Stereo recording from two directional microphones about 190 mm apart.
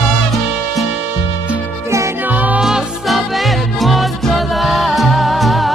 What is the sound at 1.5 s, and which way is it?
Music, 10° right (ahead or behind).